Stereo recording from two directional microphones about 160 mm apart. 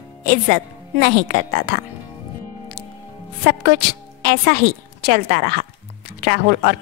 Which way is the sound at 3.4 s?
75° right (ahead or behind).